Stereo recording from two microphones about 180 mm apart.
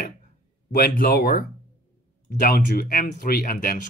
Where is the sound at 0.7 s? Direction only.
55° left (ahead or behind).